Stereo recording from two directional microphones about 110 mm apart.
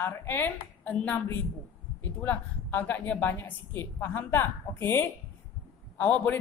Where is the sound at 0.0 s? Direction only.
20° left (ahead or behind).